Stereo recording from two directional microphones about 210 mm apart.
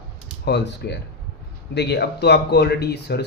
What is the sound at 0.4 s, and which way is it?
Speech, 55° left (ahead or behind).